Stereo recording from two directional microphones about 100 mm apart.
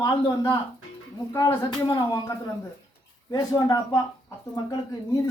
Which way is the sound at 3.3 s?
45° left (ahead or behind).